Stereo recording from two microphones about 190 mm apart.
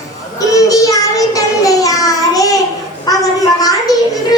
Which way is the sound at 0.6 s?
20° left (ahead or behind).